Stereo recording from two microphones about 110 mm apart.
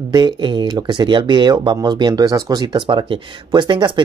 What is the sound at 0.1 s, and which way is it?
Speech, 45° right (ahead or behind).